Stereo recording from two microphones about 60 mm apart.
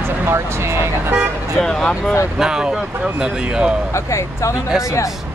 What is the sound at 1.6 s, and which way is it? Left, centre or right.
Speech, centre.